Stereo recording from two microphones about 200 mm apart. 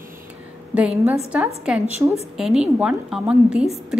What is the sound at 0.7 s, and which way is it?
A woman's voice, 5° right (ahead or behind).